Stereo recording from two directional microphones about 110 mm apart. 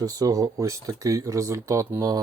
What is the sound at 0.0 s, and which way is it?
Speech, 35° right (ahead or behind).